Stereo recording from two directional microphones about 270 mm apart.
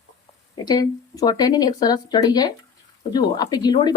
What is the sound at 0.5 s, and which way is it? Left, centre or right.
Speech, centre.